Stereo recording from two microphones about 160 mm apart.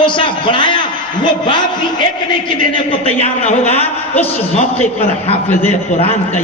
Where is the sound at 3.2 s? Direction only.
40° left (ahead or behind).